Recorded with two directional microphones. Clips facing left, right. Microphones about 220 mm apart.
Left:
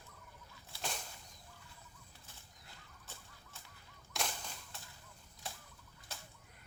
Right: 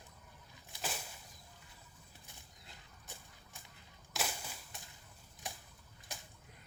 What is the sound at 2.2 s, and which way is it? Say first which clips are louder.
Bird flight: right 1 dB; 15° right (ahead or behind).